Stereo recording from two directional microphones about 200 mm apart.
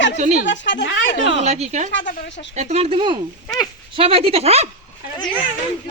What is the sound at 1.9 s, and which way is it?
Speech, 65° left (ahead or behind).